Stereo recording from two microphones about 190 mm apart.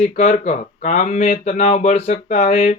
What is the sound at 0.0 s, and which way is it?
Speech, 35° left (ahead or behind).